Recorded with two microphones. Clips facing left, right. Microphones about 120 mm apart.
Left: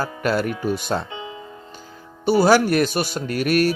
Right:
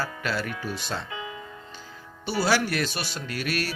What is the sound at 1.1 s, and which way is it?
Music, 25° left (ahead or behind).